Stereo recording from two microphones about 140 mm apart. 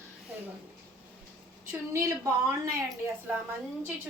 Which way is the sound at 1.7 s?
20° right (ahead or behind).